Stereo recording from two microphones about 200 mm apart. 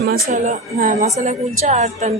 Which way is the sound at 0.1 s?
40° right (ahead or behind).